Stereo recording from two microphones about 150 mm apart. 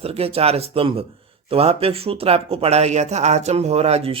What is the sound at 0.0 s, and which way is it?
A man's voice, 40° right (ahead or behind).